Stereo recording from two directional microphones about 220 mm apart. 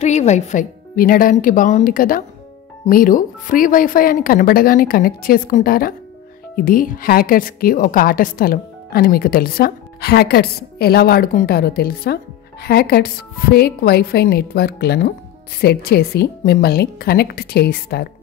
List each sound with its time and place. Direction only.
0.0 s a woman's voice: 30° left (ahead or behind)